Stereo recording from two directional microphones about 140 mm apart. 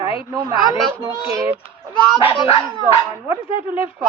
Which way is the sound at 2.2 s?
40° left (ahead or behind).